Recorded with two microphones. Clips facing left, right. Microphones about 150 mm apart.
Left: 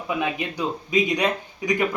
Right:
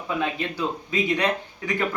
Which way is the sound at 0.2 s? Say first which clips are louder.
Left 1 dB; 15° left (ahead or behind).